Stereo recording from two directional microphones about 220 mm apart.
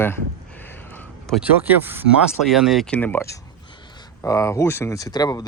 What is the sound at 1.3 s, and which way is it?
Speech, 10° right (ahead or behind).